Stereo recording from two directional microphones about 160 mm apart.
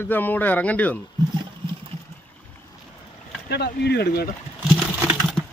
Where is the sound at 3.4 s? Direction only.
90° left.